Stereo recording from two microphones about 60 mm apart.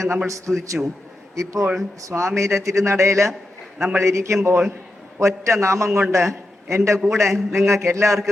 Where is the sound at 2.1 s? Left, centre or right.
Right.